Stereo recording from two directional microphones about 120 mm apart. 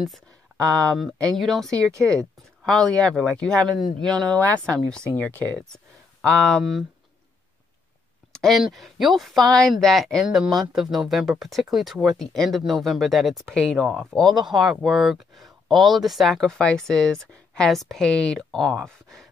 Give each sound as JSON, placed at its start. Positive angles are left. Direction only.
{"t": 0.7, "sound": "speech", "side_deg": 10}
{"t": 1.7, "sound": "speech", "side_deg": -25}
{"t": 2.1, "sound": "speech", "side_deg": 5}
{"t": 8.3, "sound": "speech", "side_deg": 5}